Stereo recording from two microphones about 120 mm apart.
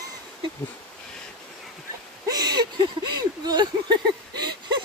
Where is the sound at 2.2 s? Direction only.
35° right (ahead or behind).